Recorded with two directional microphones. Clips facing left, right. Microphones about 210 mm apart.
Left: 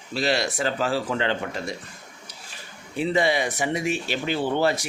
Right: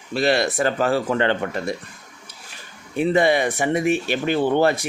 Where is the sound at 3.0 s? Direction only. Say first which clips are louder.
Right 5 dB; 55° right (ahead or behind).